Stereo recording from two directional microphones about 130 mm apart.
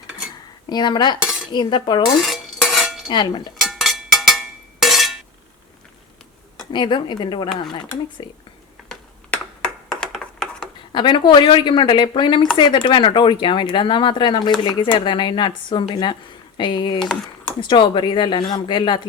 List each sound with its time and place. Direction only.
0.7 s speech: 35° left (ahead or behind)
1.2 s cutlery: 5° right (ahead or behind)
1.5 s speech: 35° left (ahead or behind)
2.1 s cutlery: centre (ahead or behind)
3.1 s speech: 35° left (ahead or behind)
3.6 s a sound: centre (ahead or behind)
6.7 s speech: 35° left (ahead or behind)
8.9 s a sound: 5° left (ahead or behind)
10.9 s speech: 35° left (ahead or behind)
17.0 s speech: 5° left (ahead or behind)
17.6 s speech: 40° left (ahead or behind)